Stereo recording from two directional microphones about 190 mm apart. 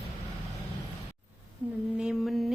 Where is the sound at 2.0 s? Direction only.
Centre (ahead or behind).